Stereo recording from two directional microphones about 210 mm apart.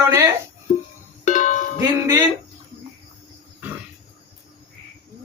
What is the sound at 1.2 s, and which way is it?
Music, 35° left (ahead or behind).